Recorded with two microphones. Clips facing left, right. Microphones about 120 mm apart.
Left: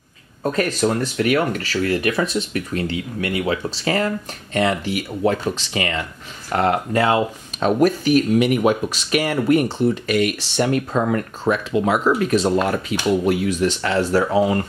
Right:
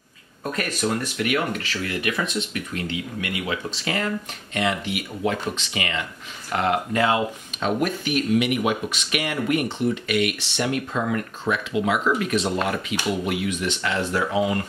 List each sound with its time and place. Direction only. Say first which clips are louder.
0.4 s speech: left 7 dB; 30° left (ahead or behind)